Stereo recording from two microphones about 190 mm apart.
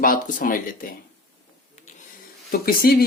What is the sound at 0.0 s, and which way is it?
Speech, 45° left (ahead or behind).